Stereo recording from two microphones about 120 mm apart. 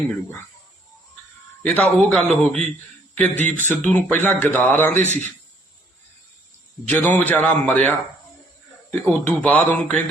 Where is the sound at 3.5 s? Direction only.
15° left (ahead or behind).